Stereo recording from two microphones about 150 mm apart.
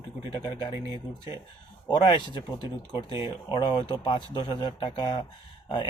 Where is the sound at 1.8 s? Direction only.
30° left (ahead or behind).